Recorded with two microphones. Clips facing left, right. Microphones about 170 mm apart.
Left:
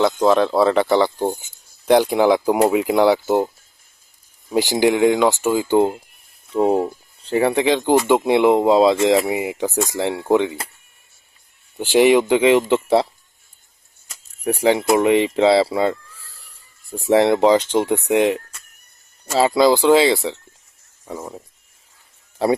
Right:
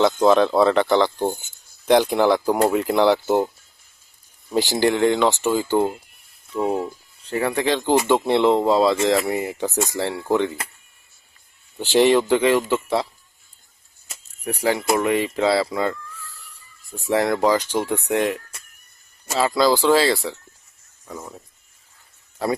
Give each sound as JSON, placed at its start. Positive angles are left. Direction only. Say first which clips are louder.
{"t": 0.0, "sound": "speech", "louder": "even", "side_deg": 0}
{"t": 6.5, "sound": "speech", "louder": "left 5 dB", "side_deg": 30}
{"t": 7.5, "sound": "speech", "louder": "even", "side_deg": 15}
{"t": 11.8, "sound": "speech", "louder": "left 2 dB", "side_deg": 10}
{"t": 14.4, "sound": "speech", "louder": "left 5 dB", "side_deg": 25}
{"t": 22.4, "sound": "speech", "louder": "left 5 dB", "side_deg": 30}